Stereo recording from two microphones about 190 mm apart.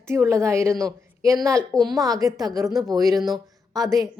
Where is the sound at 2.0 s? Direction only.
20° right (ahead or behind).